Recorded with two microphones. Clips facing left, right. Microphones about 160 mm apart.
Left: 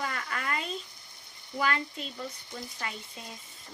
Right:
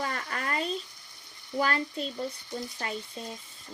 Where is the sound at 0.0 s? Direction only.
35° right (ahead or behind).